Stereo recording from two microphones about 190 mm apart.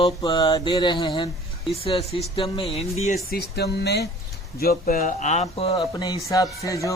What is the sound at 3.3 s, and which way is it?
A man's voice, 60° left (ahead or behind).